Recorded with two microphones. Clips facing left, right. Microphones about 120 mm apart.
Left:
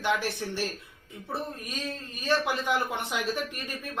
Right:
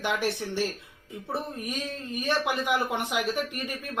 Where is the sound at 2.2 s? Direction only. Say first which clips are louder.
Left 1 dB; 15° right (ahead or behind).